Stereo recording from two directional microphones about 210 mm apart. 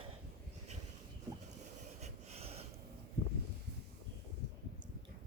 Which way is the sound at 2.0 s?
30° right (ahead or behind).